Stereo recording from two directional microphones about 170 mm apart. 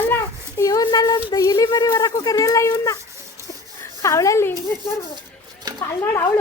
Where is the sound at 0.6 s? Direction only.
20° left (ahead or behind).